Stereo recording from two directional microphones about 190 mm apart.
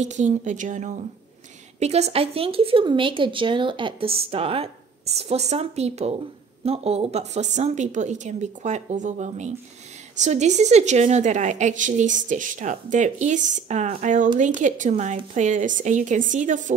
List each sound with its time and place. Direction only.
0.0 s speech: 40° right (ahead or behind)